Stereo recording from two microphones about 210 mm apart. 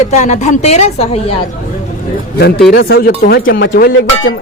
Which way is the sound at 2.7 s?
45° left (ahead or behind).